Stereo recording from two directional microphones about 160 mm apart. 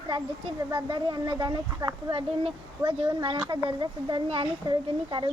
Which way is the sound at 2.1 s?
35° right (ahead or behind).